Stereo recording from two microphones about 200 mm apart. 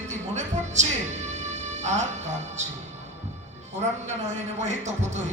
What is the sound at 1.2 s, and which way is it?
Music, 35° right (ahead or behind).